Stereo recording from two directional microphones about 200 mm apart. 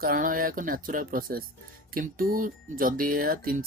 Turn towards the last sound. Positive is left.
turn(degrees=-45)  # may be behind; listen again after turning